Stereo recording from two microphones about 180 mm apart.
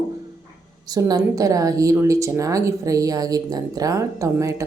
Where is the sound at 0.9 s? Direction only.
20° right (ahead or behind).